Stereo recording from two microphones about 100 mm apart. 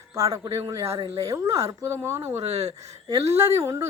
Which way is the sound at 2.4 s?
90° right.